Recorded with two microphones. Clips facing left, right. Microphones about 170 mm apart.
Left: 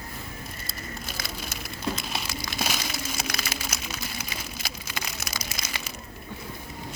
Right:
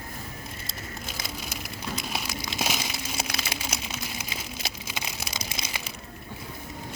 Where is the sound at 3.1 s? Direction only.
25° right (ahead or behind).